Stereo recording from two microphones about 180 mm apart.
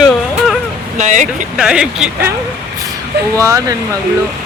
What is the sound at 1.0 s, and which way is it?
Speech, 45° right (ahead or behind).